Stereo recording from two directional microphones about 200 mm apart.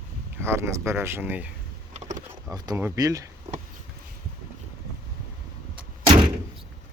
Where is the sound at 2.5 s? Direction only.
20° right (ahead or behind).